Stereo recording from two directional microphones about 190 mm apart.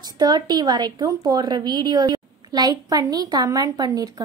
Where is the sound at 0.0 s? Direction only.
20° right (ahead or behind).